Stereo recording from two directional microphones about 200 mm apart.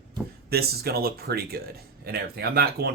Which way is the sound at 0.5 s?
50° right (ahead or behind).